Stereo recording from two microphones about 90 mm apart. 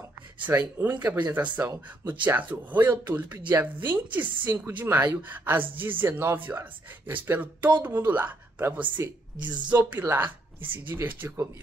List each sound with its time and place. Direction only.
0.5 s a woman's voice: 25° right (ahead or behind)